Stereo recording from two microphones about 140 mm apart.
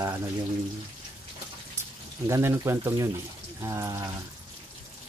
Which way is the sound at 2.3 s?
20° right (ahead or behind).